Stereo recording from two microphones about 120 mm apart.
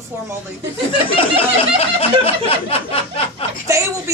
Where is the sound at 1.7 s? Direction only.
50° left (ahead or behind).